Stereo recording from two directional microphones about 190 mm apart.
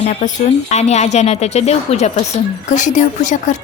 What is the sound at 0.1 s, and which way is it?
Speech, 40° left (ahead or behind).